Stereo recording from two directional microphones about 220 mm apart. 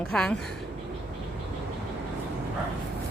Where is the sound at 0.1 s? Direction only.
5° left (ahead or behind).